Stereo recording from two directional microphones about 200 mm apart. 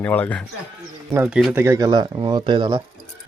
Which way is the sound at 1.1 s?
5° right (ahead or behind).